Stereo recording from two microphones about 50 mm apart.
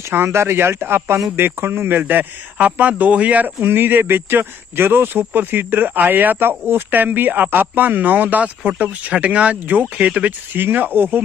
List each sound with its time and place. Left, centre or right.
0.3 s speech: right
3.6 s speech: right
9.6 s speech: right
10.5 s speech: right